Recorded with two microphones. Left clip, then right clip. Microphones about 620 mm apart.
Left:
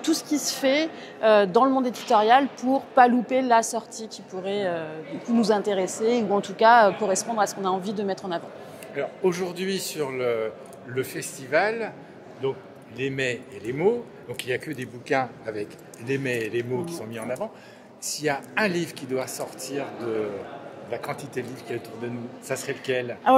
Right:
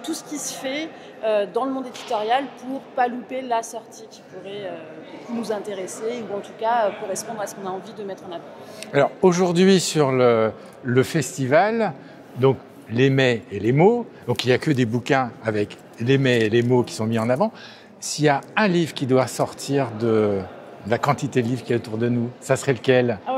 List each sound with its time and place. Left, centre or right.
0.0 s a woman's voice: left
8.9 s speech: right
12.4 s speech: right
20.9 s speech: right